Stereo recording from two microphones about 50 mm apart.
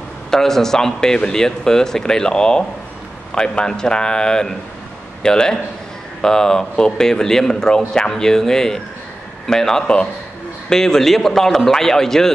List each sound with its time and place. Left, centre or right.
0.3 s speech: centre